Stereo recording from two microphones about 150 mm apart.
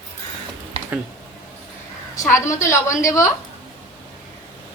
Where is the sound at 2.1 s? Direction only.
20° left (ahead or behind).